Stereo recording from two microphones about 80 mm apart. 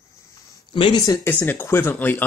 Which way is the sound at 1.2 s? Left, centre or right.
Left.